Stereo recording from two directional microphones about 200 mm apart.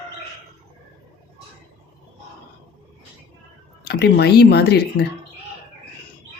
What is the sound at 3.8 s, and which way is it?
Speech, 55° left (ahead or behind).